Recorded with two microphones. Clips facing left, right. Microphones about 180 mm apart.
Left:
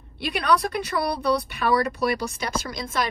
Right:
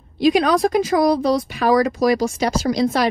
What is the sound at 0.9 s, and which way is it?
Speech, 50° right (ahead or behind).